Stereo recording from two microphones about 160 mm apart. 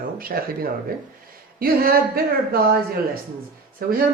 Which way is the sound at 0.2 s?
65° right (ahead or behind).